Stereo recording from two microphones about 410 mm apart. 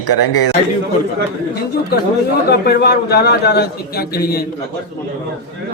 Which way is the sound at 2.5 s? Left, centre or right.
Left.